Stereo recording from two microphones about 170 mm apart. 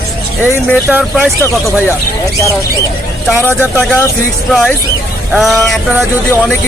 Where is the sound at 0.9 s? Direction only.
5° right (ahead or behind).